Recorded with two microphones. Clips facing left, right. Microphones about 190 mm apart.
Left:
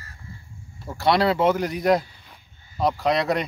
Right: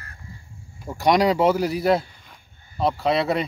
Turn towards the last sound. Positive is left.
turn(degrees=-5)  # may be behind; listen again after turning